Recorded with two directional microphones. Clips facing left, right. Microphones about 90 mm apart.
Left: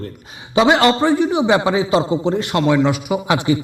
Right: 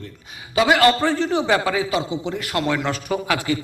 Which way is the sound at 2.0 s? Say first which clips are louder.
Left 7 dB; 35° left (ahead or behind).